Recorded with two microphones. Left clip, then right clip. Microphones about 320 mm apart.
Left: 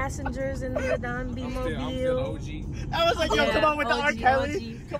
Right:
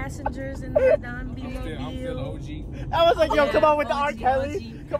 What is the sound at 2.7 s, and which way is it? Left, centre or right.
Speech, right.